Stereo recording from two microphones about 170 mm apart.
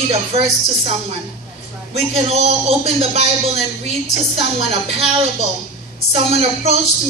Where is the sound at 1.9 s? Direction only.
40° right (ahead or behind).